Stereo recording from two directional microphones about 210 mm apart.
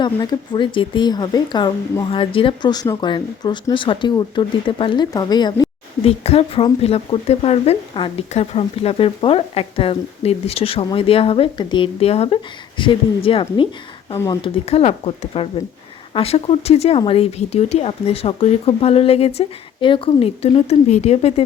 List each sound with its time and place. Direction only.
0.0 s speech: 20° left (ahead or behind)
14.6 s speech: 30° left (ahead or behind)